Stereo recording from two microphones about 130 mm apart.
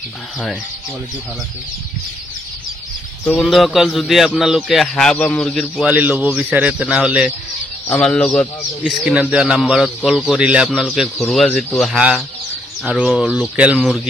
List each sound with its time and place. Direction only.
3.3 s a man's voice: centre (ahead or behind)
5.9 s a man's voice: 10° right (ahead or behind)
7.9 s speech: 5° left (ahead or behind)
8.8 s a man's voice: 10° right (ahead or behind)
12.0 s a man's voice: 10° right (ahead or behind)